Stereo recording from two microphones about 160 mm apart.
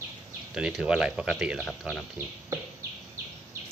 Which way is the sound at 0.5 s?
5° right (ahead or behind).